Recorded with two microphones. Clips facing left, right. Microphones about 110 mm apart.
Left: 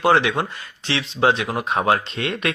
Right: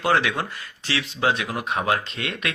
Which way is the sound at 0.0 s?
25° left (ahead or behind).